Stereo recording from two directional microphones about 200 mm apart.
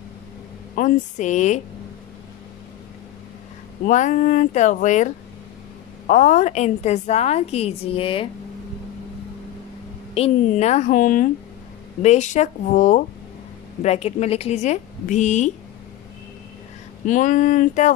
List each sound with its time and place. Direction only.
0.7 s a woman's voice: 40° left (ahead or behind)
3.8 s a woman's voice: 40° left (ahead or behind)
10.1 s a woman's voice: 30° left (ahead or behind)
17.0 s a woman's voice: 40° left (ahead or behind)